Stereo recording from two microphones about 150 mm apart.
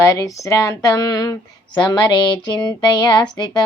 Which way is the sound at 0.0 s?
20° left (ahead or behind).